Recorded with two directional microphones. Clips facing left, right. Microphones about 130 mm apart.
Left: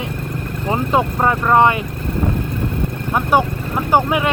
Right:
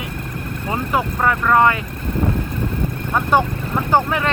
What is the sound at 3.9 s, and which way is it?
Speech, 15° left (ahead or behind).